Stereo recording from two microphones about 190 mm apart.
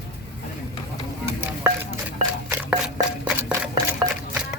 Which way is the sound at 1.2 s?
15° right (ahead or behind).